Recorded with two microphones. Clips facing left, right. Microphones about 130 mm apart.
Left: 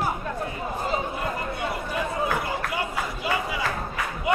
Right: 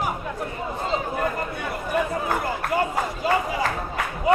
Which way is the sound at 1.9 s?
50° right (ahead or behind).